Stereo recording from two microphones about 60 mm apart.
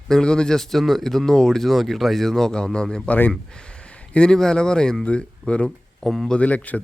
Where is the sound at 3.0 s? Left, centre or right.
Left.